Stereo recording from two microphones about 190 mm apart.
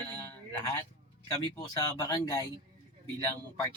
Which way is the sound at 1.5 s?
20° left (ahead or behind).